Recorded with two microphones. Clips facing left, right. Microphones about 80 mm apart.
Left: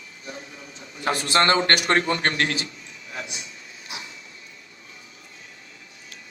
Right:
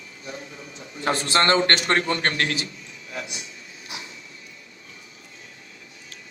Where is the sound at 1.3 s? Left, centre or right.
Left.